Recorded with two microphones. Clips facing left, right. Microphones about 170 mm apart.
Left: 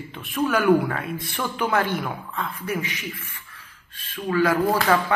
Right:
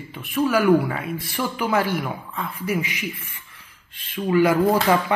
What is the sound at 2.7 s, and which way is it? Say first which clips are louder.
Speech: right 3 dB; 15° right (ahead or behind).